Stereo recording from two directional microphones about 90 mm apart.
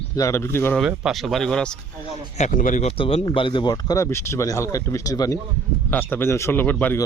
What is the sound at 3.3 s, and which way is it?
Speech, 65° left (ahead or behind).